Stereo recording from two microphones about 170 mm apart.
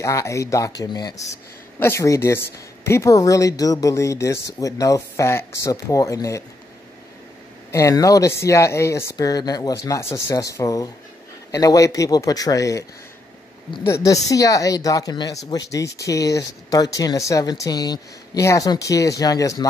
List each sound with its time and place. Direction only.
0.0 s speech: 15° left (ahead or behind)
7.7 s speech: 20° left (ahead or behind)
13.8 s a woman's voice: 20° left (ahead or behind)